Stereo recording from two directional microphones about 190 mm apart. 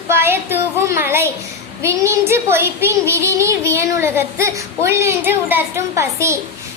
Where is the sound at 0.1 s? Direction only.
10° right (ahead or behind).